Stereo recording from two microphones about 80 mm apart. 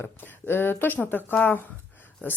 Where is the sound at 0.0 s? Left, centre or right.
Left.